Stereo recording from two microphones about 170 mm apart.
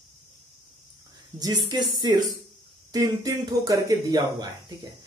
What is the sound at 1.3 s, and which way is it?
Speech, 20° right (ahead or behind).